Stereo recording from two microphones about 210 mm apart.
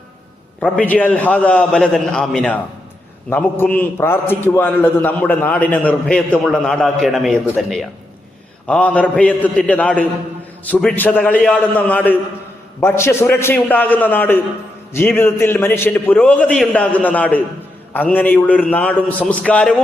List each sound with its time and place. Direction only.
0.6 s a man's voice: 5° left (ahead or behind)